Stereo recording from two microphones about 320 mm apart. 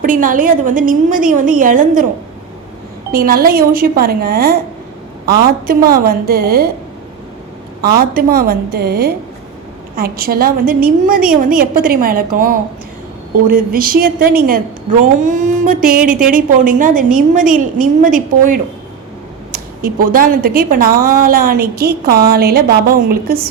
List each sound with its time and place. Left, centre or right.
0.0 s a woman's voice: right
3.1 s a woman's voice: right
7.8 s a woman's voice: right
19.8 s a woman's voice: right